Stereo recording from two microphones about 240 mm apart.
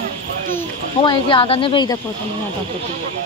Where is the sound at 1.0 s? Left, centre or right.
Left.